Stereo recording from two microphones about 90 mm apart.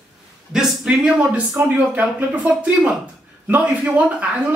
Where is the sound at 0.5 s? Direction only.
10° right (ahead or behind).